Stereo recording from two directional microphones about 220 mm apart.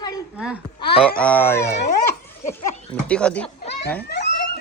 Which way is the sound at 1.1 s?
5° left (ahead or behind).